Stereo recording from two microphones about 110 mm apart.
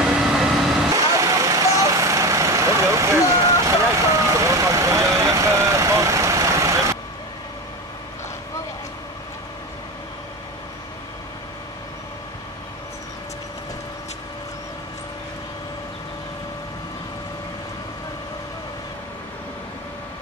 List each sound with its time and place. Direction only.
0.0 s vehicle: 5° right (ahead or behind)
0.9 s vehicle: 30° right (ahead or behind)